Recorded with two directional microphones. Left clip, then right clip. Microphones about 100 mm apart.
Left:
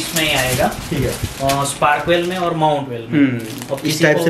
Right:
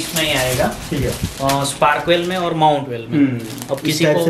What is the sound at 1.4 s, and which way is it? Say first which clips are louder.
Speech: right 1 dB; 15° right (ahead or behind).